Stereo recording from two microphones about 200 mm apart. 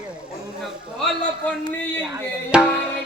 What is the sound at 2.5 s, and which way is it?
Music, 5° right (ahead or behind).